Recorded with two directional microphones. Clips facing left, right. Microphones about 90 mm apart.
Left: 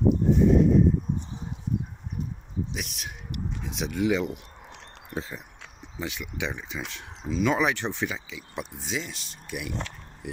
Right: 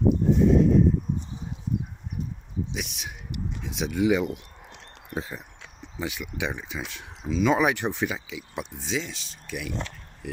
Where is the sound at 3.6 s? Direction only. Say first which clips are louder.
Right 3 dB; centre (ahead or behind).